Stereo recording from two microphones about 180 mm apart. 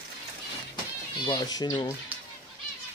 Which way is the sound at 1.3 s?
20° left (ahead or behind).